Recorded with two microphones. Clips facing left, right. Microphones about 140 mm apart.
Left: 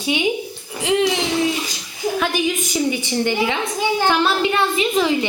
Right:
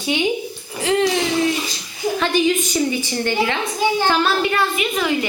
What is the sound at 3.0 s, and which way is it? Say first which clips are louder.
A woman's voice: left 1 dB; 15° left (ahead or behind).